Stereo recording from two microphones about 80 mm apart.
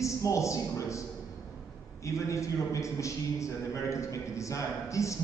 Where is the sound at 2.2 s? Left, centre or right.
Left.